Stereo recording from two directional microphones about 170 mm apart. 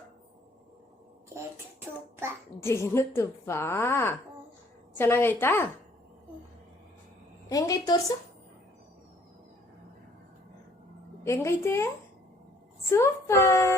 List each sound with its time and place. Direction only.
2.6 s a woman's voice: 15° left (ahead or behind)
7.5 s a woman's voice: 20° left (ahead or behind)
11.2 s a woman's voice: 15° left (ahead or behind)
12.9 s a woman's voice: 15° left (ahead or behind)